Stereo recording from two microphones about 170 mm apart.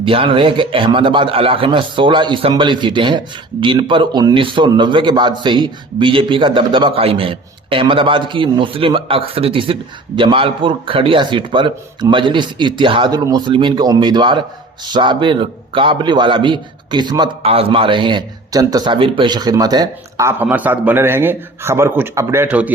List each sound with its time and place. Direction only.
0.0 s speech: 30° right (ahead or behind); by 22.7 s 10° right (ahead or behind)